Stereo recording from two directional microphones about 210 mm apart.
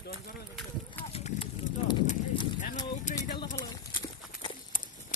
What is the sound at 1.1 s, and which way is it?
Livestock, 30° left (ahead or behind).